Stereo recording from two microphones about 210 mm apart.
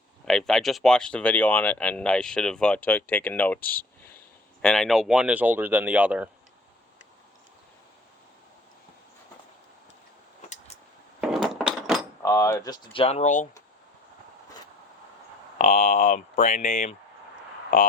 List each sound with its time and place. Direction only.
0.3 s speech: centre (ahead or behind)
11.4 s wood: centre (ahead or behind)
12.2 s speech: 15° left (ahead or behind); by 13.5 s 35° left (ahead or behind)
15.5 s speech: 35° left (ahead or behind)